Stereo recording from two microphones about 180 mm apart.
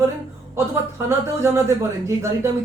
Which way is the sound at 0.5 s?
15° right (ahead or behind).